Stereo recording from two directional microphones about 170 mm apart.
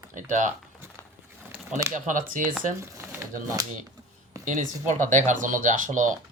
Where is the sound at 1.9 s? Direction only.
50° right (ahead or behind).